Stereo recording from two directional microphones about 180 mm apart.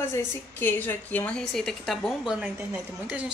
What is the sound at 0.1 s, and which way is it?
A woman's voice, 10° left (ahead or behind).